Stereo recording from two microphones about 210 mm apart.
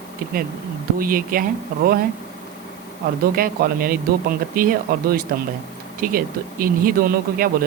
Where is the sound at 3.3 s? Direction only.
45° right (ahead or behind).